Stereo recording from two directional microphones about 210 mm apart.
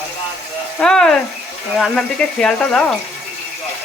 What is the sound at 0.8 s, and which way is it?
Speech, 5° left (ahead or behind).